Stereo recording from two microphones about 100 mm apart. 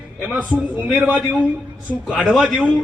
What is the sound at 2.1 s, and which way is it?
Speech, 10° left (ahead or behind).